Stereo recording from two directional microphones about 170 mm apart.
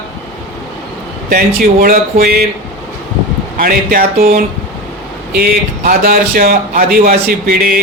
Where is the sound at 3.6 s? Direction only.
60° right (ahead or behind).